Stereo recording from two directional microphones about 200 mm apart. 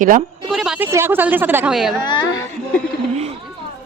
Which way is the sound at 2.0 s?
20° left (ahead or behind).